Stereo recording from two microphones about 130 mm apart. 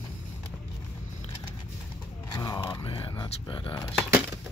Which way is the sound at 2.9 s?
35° left (ahead or behind).